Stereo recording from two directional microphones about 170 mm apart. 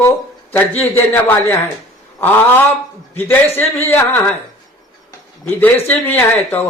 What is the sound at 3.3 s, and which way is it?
Speech, 15° left (ahead or behind).